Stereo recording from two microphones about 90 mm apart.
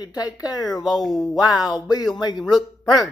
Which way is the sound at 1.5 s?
45° left (ahead or behind).